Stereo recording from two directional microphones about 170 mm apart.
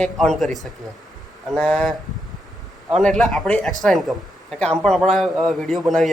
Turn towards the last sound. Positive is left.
turn(degrees=0)  # may be behind; listen again after turning